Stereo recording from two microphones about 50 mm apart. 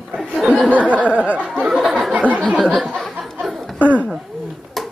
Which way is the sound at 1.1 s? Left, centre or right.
Right.